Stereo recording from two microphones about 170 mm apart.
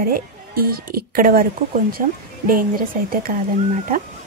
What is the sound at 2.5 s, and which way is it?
Speech, 55° right (ahead or behind).